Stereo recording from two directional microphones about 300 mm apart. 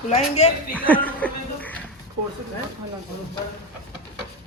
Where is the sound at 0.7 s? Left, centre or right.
Centre.